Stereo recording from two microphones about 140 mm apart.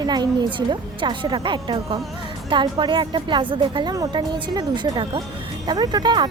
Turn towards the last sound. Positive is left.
turn(degrees=-30)  # may be behind; listen again after turning